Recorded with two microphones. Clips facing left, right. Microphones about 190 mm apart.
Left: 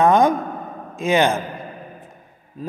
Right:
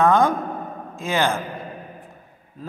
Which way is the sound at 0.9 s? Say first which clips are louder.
Left 5 dB; 20° left (ahead or behind).